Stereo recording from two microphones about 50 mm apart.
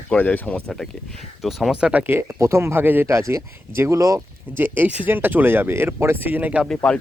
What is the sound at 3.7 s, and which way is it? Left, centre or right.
Speech, right.